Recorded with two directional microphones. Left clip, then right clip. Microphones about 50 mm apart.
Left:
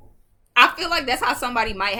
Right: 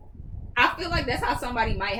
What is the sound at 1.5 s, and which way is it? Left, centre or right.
Speech, left.